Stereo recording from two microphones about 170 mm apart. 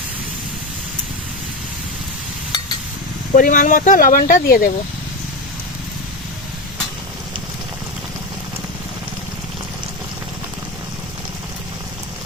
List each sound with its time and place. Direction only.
3.3 s speech: 50° left (ahead or behind)